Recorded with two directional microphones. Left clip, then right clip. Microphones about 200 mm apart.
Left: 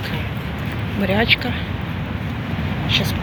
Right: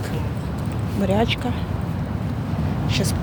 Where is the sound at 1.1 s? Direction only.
10° right (ahead or behind).